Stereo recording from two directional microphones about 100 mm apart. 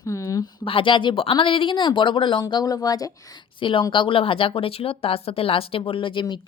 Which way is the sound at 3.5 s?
55° left (ahead or behind).